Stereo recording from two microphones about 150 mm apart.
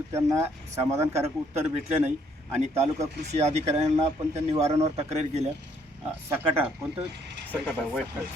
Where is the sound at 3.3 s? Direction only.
50° right (ahead or behind).